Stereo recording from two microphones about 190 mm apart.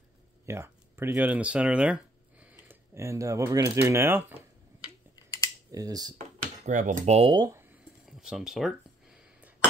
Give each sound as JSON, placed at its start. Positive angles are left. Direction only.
{"t": 0.5, "sound": "speech", "side_deg": -15}
{"t": 4.8, "sound": "a sound", "side_deg": 20}
{"t": 5.7, "sound": "speech", "side_deg": -20}
{"t": 6.6, "sound": "speech", "side_deg": -40}
{"t": 8.2, "sound": "speech", "side_deg": -5}